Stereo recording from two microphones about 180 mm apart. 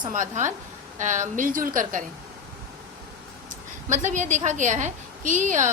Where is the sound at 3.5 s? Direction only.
45° right (ahead or behind).